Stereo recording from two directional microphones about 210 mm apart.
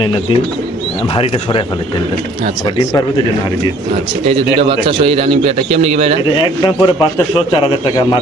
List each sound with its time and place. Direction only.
1.1 s a man's voice: 25° left (ahead or behind)
4.3 s a man's voice: 25° right (ahead or behind)
6.3 s a man's voice: 20° left (ahead or behind)